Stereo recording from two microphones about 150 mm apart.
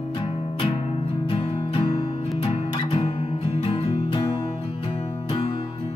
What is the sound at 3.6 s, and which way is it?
Music, 35° left (ahead or behind).